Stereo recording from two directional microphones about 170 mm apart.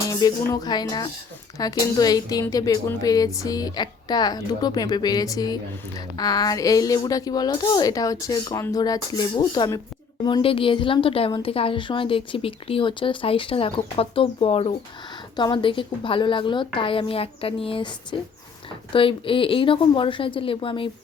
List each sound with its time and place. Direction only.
0.1 s a woman's voice: 20° left (ahead or behind)
18.9 s a woman's voice: 30° left (ahead or behind)